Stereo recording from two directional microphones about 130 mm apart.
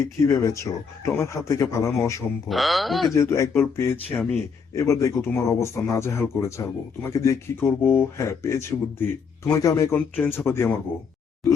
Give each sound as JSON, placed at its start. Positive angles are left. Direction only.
{"t": 0.2, "sound": "speech", "side_deg": 25}
{"t": 2.5, "sound": "speech", "side_deg": 0}
{"t": 3.2, "sound": "speech", "side_deg": 20}